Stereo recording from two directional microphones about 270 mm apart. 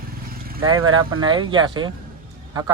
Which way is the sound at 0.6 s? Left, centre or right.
Right.